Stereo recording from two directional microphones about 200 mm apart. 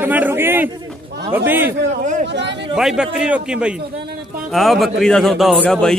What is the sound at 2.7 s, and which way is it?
Speech, centre (ahead or behind).